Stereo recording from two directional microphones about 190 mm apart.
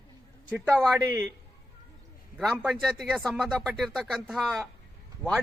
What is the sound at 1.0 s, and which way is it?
Speech, 15° right (ahead or behind).